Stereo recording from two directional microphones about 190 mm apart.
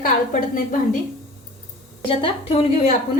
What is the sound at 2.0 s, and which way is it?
Speech, 30° left (ahead or behind).